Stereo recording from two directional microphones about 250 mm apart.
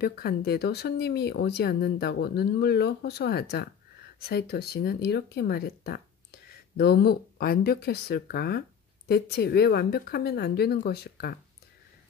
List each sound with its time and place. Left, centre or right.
0.0 s speech: left